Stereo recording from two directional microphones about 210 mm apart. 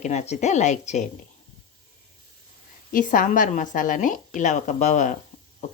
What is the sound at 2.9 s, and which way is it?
Speech, 40° left (ahead or behind).